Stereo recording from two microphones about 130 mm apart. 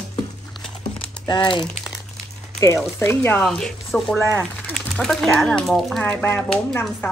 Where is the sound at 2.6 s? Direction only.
20° left (ahead or behind).